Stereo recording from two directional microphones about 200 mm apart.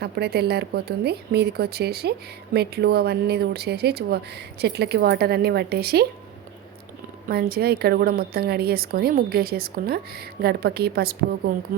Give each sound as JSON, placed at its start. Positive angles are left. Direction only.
{"t": 0.0, "sound": "speech", "side_deg": -55}
{"t": 7.3, "sound": "speech", "side_deg": -50}